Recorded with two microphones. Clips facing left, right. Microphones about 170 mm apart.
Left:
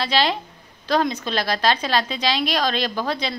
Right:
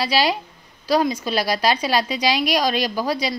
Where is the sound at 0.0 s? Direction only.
10° right (ahead or behind).